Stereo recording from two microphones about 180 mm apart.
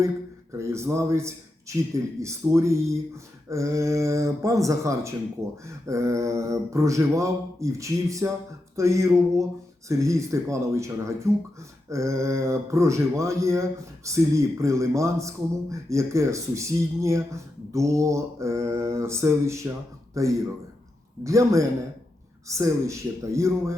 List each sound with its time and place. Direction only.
0.5 s speech: 15° right (ahead or behind)